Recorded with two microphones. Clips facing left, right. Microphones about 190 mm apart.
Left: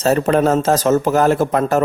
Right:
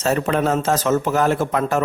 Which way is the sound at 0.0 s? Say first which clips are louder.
Left 5 dB; 40° left (ahead or behind).